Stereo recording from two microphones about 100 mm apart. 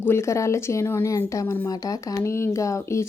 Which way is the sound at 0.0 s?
25° left (ahead or behind).